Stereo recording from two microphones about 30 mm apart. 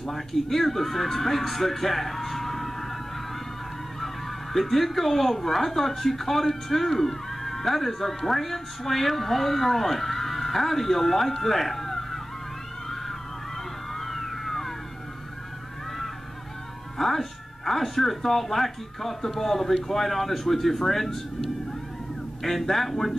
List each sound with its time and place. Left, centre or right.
0.0 s speech: centre
4.0 s speech: centre
13.9 s a sound: centre
17.0 s speech: centre